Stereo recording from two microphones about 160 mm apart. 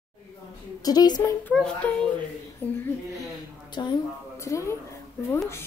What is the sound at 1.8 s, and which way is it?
Speech, 10° left (ahead or behind).